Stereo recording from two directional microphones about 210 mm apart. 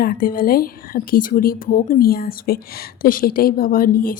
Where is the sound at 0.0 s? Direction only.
45° left (ahead or behind).